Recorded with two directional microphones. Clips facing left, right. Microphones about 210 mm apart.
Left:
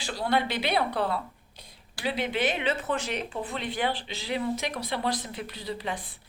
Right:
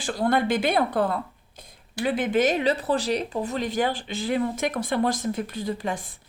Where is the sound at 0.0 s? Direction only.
50° right (ahead or behind).